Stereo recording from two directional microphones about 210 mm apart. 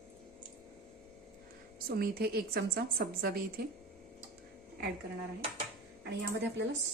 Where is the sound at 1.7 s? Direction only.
45° right (ahead or behind).